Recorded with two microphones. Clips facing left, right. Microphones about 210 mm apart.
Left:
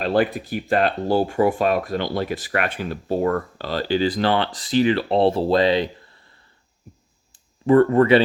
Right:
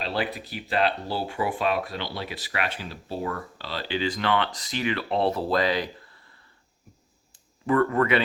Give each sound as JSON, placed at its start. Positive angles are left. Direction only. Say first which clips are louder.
{"t": 0.0, "sound": "speech", "louder": "left 9 dB", "side_deg": 50}
{"t": 7.3, "sound": "speech", "louder": "left 8 dB", "side_deg": 30}